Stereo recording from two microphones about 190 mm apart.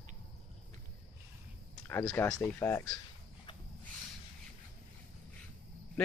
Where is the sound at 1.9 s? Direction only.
15° left (ahead or behind).